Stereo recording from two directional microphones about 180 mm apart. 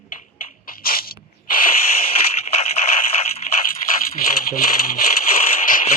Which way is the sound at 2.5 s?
35° left (ahead or behind).